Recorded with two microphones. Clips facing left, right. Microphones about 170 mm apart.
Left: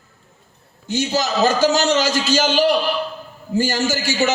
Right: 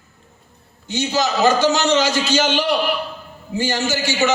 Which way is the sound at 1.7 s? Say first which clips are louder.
Even; 40° left (ahead or behind).